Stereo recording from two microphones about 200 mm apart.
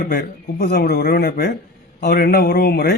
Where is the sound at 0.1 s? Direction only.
50° left (ahead or behind).